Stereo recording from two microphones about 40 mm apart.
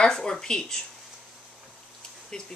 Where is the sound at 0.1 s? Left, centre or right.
Centre.